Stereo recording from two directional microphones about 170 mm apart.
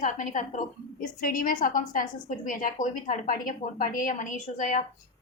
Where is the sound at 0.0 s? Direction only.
50° left (ahead or behind).